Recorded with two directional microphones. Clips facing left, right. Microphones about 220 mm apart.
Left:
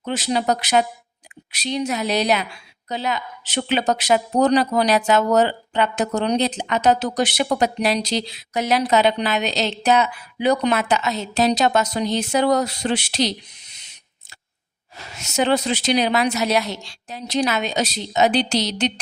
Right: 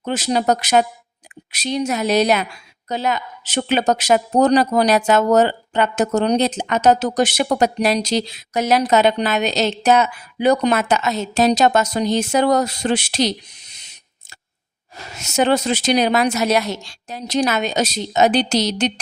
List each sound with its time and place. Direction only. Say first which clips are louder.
0.0 s speech: right 3 dB; 45° right (ahead or behind)
14.9 s speech: right 3 dB; 45° right (ahead or behind)